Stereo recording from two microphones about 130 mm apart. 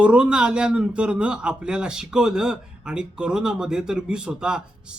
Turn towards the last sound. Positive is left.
turn(degrees=-5)  # may be behind; listen again after turning